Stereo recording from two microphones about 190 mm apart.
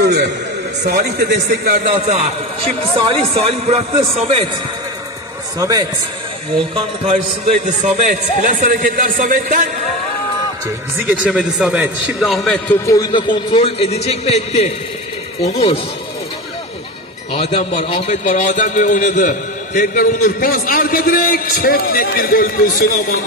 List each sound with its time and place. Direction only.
0.8 s a man's voice: 60° right (ahead or behind)
3.1 s a man's voice: 30° right (ahead or behind)
5.6 s a man's voice: 20° right (ahead or behind)
7.1 s a man's voice: 35° right (ahead or behind)
11.2 s a man's voice: 5° right (ahead or behind)
12.8 s a man's voice: 20° left (ahead or behind); by 14.7 s 35° left (ahead or behind)
17.3 s a man's voice: 35° left (ahead or behind); by 23.1 s 50° left (ahead or behind)